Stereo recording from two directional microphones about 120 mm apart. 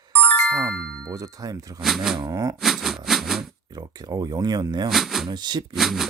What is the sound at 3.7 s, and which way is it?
Speech, 35° right (ahead or behind).